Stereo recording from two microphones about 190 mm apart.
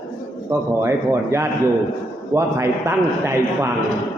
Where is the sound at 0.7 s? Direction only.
15° right (ahead or behind).